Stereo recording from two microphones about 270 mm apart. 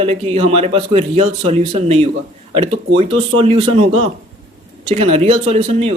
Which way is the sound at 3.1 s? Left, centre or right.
Right.